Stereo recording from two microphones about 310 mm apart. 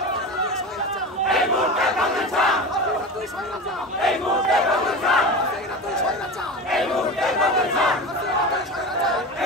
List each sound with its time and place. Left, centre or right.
1.3 s crowd: centre
4.0 s battle cry: centre
6.7 s battle cry: centre